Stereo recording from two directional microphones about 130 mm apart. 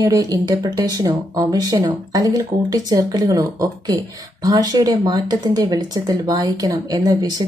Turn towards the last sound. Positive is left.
turn(degrees=-30)  # may be behind; listen again after turning